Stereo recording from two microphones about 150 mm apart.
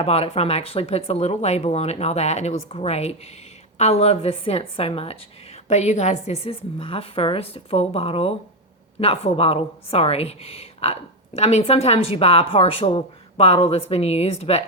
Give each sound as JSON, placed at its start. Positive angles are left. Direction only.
{"t": 0.0, "sound": "a woman's voice", "side_deg": 45}